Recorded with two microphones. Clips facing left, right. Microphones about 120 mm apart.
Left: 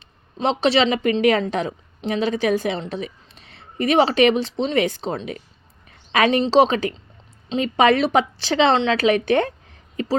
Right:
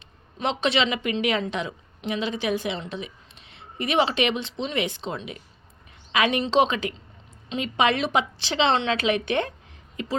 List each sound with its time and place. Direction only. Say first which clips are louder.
0.3 s a woman's voice: left 6 dB; 35° left (ahead or behind)